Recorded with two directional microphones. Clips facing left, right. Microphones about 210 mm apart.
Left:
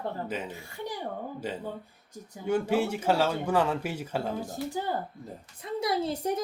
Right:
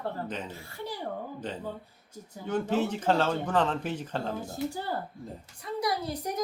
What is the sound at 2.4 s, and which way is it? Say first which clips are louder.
A woman's voice: left 2 dB; 10° left (ahead or behind).